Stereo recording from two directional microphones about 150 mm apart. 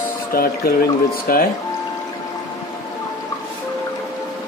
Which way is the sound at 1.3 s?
75° left (ahead or behind).